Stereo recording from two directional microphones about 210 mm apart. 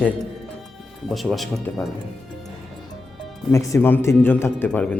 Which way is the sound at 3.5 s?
15° left (ahead or behind).